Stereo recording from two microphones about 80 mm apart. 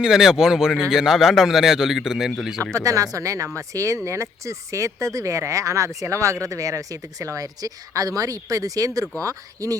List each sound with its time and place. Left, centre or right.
0.0 s speech: centre
2.6 s speech: right